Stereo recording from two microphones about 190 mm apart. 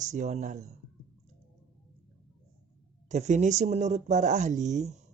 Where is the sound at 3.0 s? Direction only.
35° right (ahead or behind).